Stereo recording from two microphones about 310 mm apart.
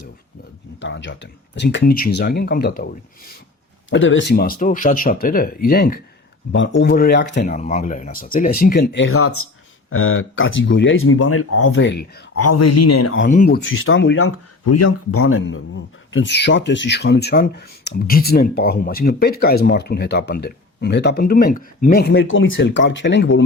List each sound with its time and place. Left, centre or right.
0.8 s speech: left
12.4 s speech: left
13.2 s speech: left